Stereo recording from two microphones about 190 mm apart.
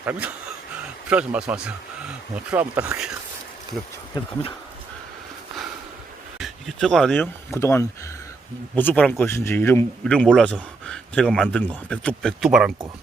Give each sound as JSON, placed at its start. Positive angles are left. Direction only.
{"t": 0.0, "sound": "speech", "side_deg": -10}
{"t": 4.1, "sound": "speech", "side_deg": 20}
{"t": 6.4, "sound": "speech", "side_deg": 0}
{"t": 7.5, "sound": "speech", "side_deg": 15}